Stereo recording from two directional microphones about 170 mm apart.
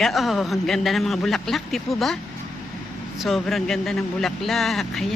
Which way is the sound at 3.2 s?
Centre (ahead or behind).